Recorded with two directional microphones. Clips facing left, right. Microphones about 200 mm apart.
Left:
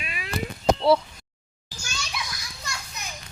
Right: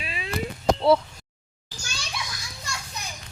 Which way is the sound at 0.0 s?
30° right (ahead or behind).